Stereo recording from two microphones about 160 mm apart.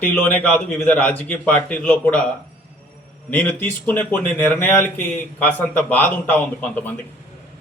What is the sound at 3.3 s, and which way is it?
Speech, 10° left (ahead or behind).